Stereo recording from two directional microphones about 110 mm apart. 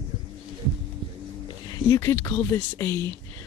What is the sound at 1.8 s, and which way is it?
Speech, 30° left (ahead or behind).